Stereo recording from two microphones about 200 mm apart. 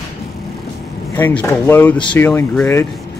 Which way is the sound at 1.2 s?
10° left (ahead or behind).